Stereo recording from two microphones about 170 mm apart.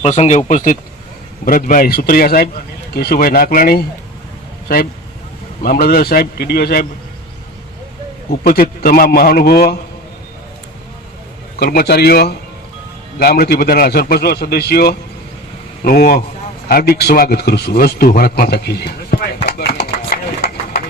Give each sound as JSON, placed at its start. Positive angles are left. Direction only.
{"t": 0.0, "sound": "a man's voice", "side_deg": 40}
{"t": 5.6, "sound": "a man's voice", "side_deg": 60}
{"t": 8.3, "sound": "a man's voice", "side_deg": 60}
{"t": 11.6, "sound": "a man's voice", "side_deg": 65}
{"t": 19.5, "sound": "chopping", "side_deg": 70}